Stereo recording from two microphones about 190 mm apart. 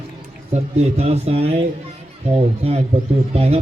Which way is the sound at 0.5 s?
35° right (ahead or behind).